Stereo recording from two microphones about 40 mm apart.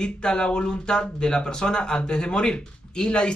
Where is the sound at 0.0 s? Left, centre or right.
Left.